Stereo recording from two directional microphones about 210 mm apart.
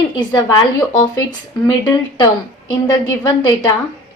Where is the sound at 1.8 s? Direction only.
20° left (ahead or behind).